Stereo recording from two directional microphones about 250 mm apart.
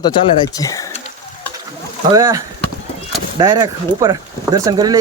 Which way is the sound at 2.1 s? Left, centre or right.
Centre.